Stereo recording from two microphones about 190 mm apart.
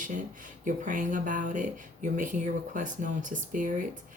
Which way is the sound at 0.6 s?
40° right (ahead or behind).